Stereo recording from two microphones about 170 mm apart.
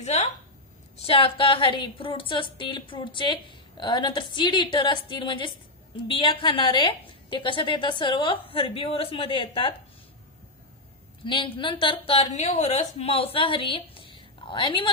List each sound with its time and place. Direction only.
0.0 s a sound: 40° left (ahead or behind)
0.9 s a woman's voice: 35° left (ahead or behind)
11.2 s a woman's voice: 30° left (ahead or behind)